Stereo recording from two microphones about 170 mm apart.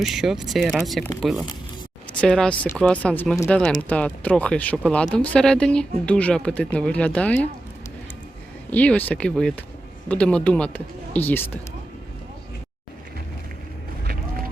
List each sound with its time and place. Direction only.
0.0 s speech: centre (ahead or behind)
8.7 s speech: 10° left (ahead or behind)
14.1 s run: 60° right (ahead or behind)